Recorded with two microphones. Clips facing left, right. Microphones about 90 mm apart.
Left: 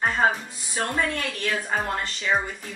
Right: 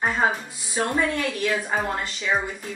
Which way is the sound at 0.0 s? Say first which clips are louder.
Even; 10° right (ahead or behind).